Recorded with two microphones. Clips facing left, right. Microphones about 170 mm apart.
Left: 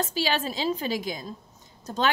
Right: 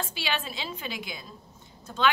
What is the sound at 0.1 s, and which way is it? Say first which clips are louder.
A woman's voice: left 6 dB; 40° left (ahead or behind).